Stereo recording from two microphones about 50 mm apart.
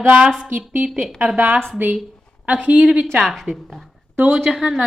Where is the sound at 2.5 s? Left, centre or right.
Right.